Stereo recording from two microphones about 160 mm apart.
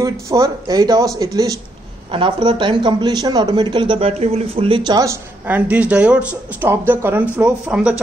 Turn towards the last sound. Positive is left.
turn(degrees=-5)  # may be behind; listen again after turning